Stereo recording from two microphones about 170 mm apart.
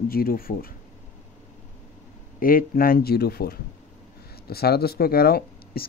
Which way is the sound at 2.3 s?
55° left (ahead or behind).